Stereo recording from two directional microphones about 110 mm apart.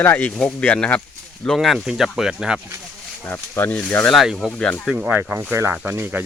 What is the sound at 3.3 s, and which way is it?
Speech, 20° left (ahead or behind).